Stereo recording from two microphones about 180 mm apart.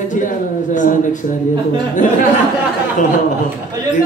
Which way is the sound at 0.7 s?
45° left (ahead or behind).